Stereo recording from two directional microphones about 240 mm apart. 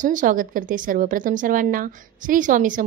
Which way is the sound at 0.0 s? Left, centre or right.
Right.